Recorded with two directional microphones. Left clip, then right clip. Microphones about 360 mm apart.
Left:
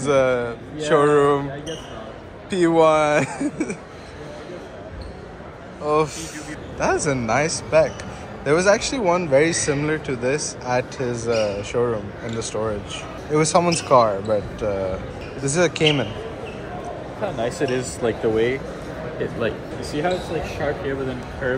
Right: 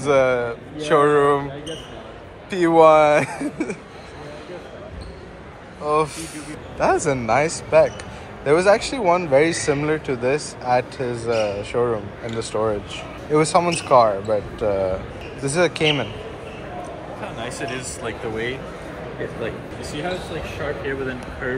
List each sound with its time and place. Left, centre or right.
0.0 s speech: centre
2.5 s speech: centre
5.9 s speech: centre
17.4 s speech: left